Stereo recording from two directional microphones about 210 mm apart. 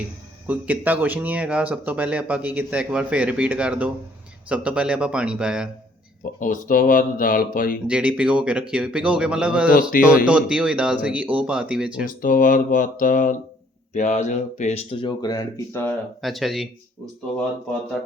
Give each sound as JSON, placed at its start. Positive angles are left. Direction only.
{"t": 0.4, "sound": "speech", "side_deg": -5}
{"t": 6.4, "sound": "speech", "side_deg": 40}
{"t": 7.9, "sound": "speech", "side_deg": -5}
{"t": 12.0, "sound": "speech", "side_deg": 40}
{"t": 16.2, "sound": "speech", "side_deg": 0}